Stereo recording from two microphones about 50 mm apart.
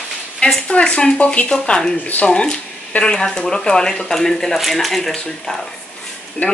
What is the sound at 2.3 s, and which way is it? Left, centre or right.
Speech, centre.